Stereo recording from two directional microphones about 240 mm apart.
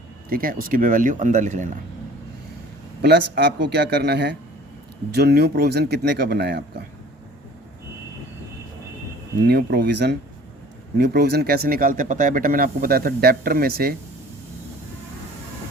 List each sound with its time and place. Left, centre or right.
0.3 s speech: right
3.0 s speech: right
9.4 s speech: right